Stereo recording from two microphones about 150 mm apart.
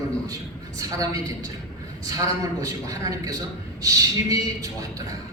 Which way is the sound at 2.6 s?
25° right (ahead or behind).